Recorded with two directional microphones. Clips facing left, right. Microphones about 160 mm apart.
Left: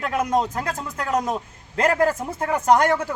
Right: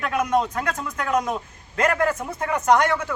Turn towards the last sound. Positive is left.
turn(degrees=35)  # may be behind; listen again after turning